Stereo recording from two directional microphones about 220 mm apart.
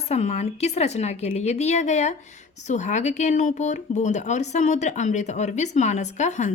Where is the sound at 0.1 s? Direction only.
30° left (ahead or behind).